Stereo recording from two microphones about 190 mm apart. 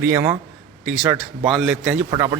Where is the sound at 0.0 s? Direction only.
10° right (ahead or behind).